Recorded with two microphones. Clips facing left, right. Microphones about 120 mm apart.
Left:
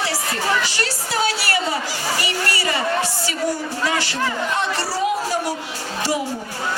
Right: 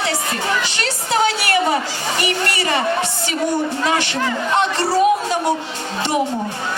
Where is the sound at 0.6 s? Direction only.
20° right (ahead or behind).